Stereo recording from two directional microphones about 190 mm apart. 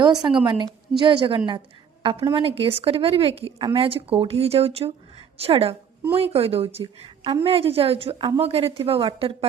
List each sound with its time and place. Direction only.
0.0 s a woman's voice: 20° right (ahead or behind)